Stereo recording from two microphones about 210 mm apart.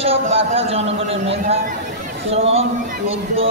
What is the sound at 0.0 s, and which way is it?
A man's voice, 25° right (ahead or behind).